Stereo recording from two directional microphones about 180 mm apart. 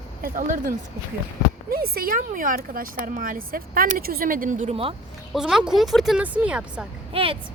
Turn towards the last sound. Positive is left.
turn(degrees=-30)  # may be behind; listen again after turning